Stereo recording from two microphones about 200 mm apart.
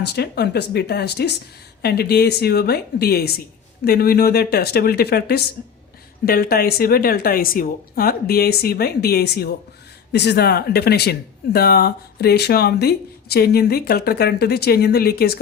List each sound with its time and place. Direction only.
0.0 s speech: 55° left (ahead or behind)